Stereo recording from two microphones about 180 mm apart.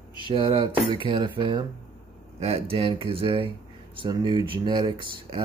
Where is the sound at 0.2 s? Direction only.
30° right (ahead or behind).